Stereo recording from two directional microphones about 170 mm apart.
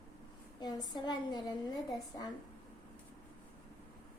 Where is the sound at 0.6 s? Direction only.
25° left (ahead or behind).